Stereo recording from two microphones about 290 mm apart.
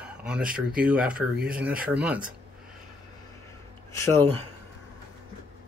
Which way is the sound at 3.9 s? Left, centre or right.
Centre.